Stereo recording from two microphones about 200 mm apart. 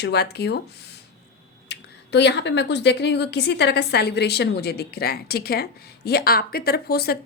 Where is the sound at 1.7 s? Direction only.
60° left (ahead or behind).